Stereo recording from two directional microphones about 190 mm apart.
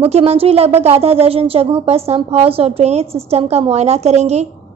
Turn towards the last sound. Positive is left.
turn(degrees=-35)  # may be behind; listen again after turning